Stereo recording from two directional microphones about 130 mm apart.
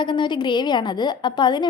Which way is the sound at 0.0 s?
35° left (ahead or behind).